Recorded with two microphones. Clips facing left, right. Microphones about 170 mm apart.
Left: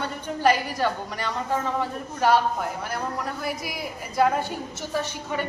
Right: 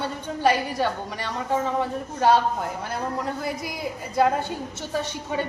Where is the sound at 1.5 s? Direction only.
20° right (ahead or behind).